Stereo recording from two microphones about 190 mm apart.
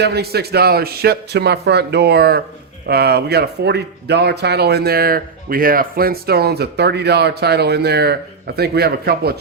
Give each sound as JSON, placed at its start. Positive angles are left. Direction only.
{"t": 0.0, "sound": "speech", "side_deg": -60}